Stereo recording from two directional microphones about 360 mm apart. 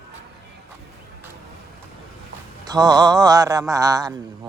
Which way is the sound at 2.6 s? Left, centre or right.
Centre.